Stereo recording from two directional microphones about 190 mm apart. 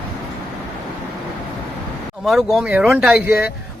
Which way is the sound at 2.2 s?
Centre (ahead or behind).